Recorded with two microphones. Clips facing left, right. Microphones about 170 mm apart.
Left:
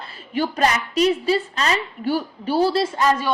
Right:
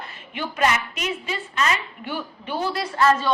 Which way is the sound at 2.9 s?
20° left (ahead or behind).